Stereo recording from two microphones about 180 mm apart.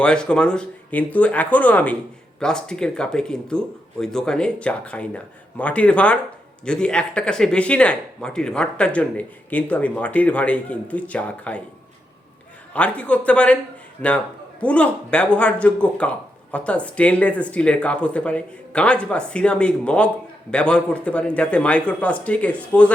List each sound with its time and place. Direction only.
0.0 s speech: 5° left (ahead or behind)
12.7 s speech: 10° left (ahead or behind)
14.6 s speech: 5° left (ahead or behind)